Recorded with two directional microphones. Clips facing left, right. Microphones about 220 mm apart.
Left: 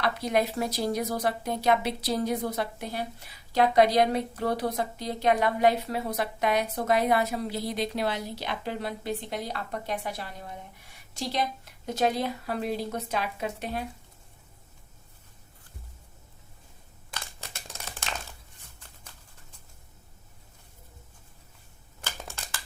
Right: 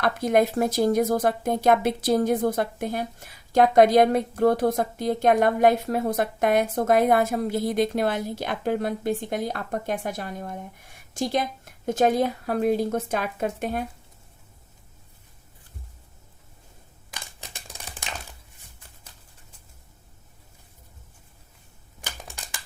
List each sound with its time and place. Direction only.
0.0 s speech: 50° right (ahead or behind)
17.2 s a sound: 15° right (ahead or behind)
22.0 s scissors: 15° right (ahead or behind)